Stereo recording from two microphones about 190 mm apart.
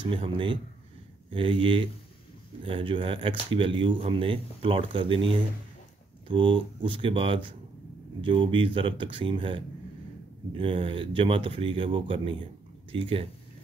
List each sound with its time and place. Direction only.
0.1 s speech: 25° right (ahead or behind)